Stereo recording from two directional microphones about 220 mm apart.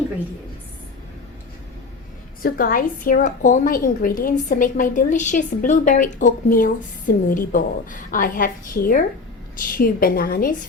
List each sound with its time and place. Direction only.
2.4 s a woman's voice: 40° left (ahead or behind)